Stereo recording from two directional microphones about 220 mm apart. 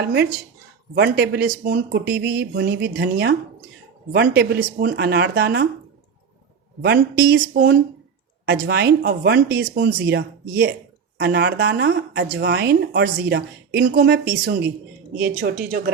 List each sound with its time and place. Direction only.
0.0 s speech: 50° right (ahead or behind)
6.8 s speech: 50° right (ahead or behind)